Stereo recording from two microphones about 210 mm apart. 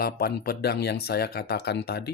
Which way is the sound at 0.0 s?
45° left (ahead or behind).